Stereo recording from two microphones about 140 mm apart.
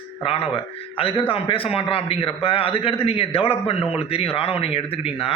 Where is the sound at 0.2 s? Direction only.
40° left (ahead or behind).